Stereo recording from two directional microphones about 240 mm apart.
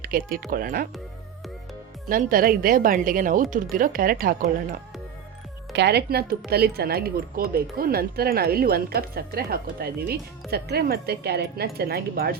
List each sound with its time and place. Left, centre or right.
0.0 s speech: right
2.0 s speech: right
5.7 s speech: right